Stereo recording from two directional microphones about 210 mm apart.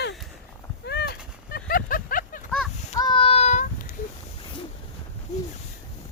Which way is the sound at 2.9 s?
20° left (ahead or behind).